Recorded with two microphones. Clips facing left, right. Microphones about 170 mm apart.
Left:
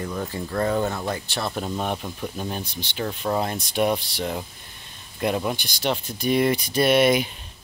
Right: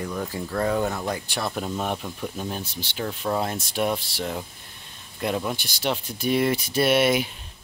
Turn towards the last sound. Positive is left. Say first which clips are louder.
# left 2 dB
turn(degrees=-5)  # may be behind; listen again after turning